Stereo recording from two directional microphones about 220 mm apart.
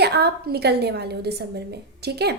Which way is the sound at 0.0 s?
50° right (ahead or behind).